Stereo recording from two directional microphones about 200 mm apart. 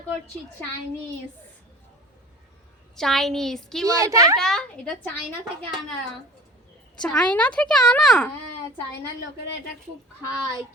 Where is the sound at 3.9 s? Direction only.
15° right (ahead or behind).